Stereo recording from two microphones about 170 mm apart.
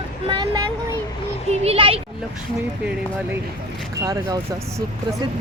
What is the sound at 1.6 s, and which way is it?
Speech, 35° right (ahead or behind).